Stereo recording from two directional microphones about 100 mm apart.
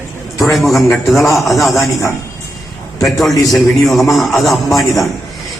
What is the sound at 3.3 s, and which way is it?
Speech, 35° left (ahead or behind).